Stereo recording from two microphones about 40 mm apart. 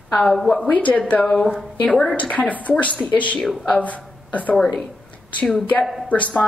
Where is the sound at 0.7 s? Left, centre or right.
Left.